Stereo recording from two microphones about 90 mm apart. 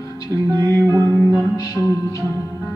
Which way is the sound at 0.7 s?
30° left (ahead or behind).